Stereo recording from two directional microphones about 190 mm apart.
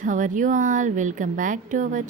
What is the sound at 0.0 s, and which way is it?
Speech, 45° right (ahead or behind).